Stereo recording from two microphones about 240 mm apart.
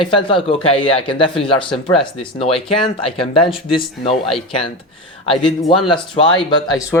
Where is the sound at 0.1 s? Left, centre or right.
Left.